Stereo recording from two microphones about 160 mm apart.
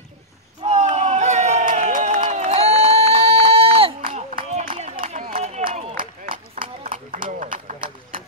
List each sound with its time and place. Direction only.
0.7 s crowd: 45° right (ahead or behind)
4.1 s a sound: 50° right (ahead or behind)
6.8 s run: 55° right (ahead or behind)
7.2 s clip-clop: 55° right (ahead or behind)